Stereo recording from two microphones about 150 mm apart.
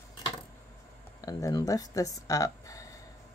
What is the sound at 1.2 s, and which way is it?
Speech, 25° left (ahead or behind).